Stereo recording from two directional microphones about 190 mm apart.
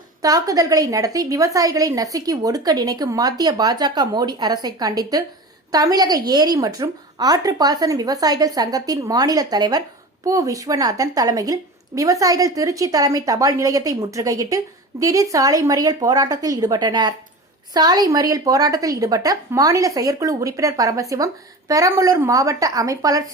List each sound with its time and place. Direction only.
0.2 s a woman's voice: 20° right (ahead or behind)